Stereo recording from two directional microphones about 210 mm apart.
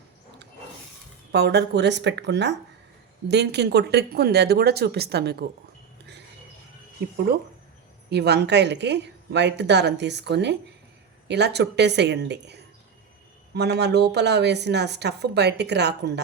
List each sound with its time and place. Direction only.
1.3 s a woman's voice: 50° right (ahead or behind)
8.1 s a woman's voice: 50° right (ahead or behind)